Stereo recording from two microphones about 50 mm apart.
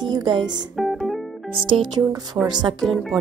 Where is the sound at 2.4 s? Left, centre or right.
Right.